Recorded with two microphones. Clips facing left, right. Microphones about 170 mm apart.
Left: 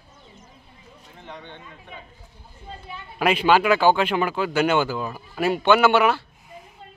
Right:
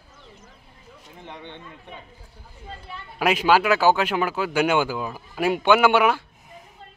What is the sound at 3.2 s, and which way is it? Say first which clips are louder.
Speech: left 1 dB; 10° right (ahead or behind).